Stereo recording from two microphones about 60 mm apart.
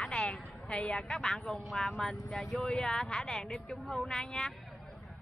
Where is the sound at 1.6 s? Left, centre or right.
Centre.